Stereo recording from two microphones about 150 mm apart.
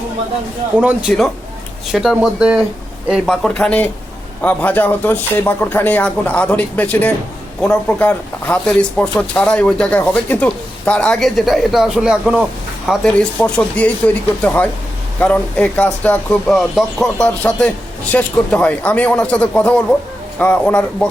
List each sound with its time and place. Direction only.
0.8 s speech: 10° right (ahead or behind); by 21.1 s 10° left (ahead or behind)